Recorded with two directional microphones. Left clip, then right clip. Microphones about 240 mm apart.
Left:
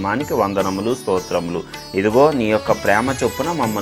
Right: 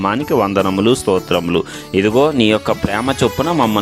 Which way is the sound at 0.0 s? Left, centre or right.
Right.